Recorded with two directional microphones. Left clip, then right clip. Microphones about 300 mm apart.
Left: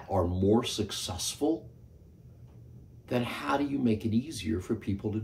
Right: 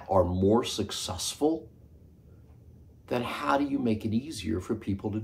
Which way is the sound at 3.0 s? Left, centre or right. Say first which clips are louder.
Right 2 dB; centre.